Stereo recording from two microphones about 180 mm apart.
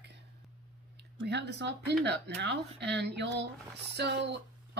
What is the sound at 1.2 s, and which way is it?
Speech, 70° right (ahead or behind).